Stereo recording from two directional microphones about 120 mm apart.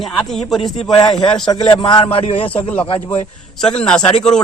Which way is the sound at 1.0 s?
40° left (ahead or behind).